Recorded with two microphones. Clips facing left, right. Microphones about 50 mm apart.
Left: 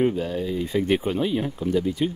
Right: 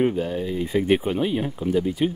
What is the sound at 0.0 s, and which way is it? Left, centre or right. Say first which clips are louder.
Speech: right 1 dB; centre.